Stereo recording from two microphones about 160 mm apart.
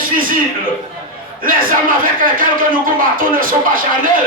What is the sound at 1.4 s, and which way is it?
Speech, 60° right (ahead or behind).